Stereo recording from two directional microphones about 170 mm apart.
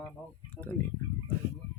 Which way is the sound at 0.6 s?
10° left (ahead or behind).